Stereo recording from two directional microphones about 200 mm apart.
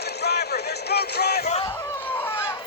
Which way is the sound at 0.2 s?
55° left (ahead or behind).